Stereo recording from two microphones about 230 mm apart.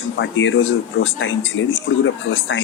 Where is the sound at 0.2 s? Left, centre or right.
Left.